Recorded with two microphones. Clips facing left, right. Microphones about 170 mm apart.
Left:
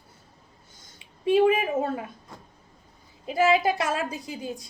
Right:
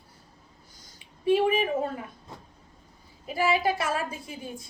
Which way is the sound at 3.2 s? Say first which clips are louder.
Left 4 dB; 25° left (ahead or behind).